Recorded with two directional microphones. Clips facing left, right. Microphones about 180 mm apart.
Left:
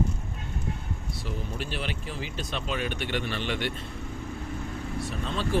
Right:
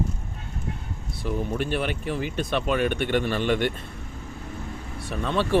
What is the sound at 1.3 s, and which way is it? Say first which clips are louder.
Speech: right 9 dB; 55° right (ahead or behind).